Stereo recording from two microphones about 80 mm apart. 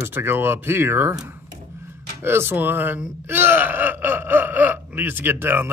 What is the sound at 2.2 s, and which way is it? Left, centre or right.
Speech, right.